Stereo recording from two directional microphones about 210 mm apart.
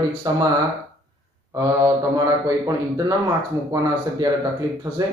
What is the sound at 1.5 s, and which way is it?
A man's voice, 15° right (ahead or behind).